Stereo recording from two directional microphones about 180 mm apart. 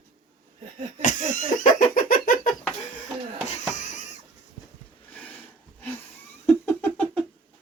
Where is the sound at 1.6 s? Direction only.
50° left (ahead or behind).